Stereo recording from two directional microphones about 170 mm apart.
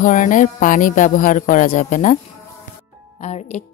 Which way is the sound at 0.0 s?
50° left (ahead or behind).